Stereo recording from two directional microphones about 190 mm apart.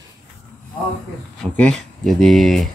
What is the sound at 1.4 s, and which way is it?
Speech, 5° left (ahead or behind).